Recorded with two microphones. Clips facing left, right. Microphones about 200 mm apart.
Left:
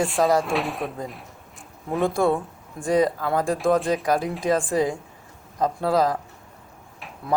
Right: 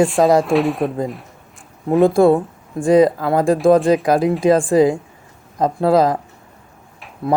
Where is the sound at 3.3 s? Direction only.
90° right.